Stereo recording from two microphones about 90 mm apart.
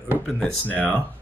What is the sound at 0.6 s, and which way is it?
Speech, 15° left (ahead or behind).